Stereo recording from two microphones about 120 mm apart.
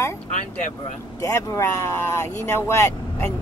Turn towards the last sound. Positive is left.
turn(degrees=25)  # may be behind; listen again after turning